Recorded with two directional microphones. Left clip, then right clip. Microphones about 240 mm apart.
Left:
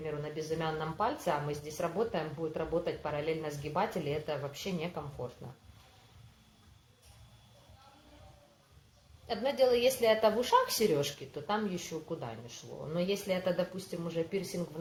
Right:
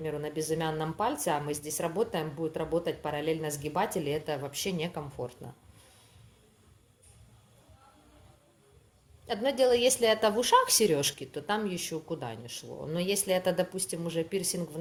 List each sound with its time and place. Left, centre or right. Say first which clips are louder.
0.0 s speech: right 4 dB; right
9.2 s speech: right 3 dB; right